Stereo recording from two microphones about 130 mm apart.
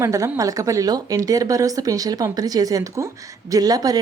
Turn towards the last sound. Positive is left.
turn(degrees=-30)  # may be behind; listen again after turning